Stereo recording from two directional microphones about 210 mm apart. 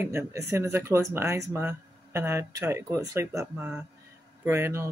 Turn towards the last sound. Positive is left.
turn(degrees=-10)  # may be behind; listen again after turning